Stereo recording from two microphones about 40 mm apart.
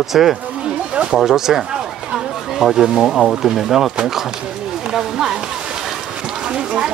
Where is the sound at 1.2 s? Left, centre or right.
Centre.